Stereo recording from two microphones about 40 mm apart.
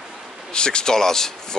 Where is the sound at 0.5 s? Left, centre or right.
Left.